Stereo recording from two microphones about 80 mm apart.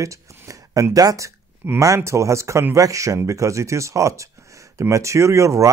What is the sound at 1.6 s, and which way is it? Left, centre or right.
Speech, right.